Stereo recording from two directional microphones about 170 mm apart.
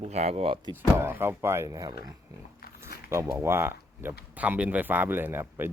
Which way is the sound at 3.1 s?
15° right (ahead or behind).